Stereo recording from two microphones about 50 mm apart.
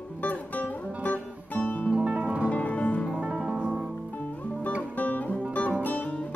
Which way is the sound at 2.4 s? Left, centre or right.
Left.